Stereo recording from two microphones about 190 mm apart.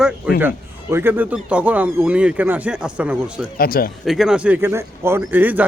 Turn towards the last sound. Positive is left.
turn(degrees=-10)  # may be behind; listen again after turning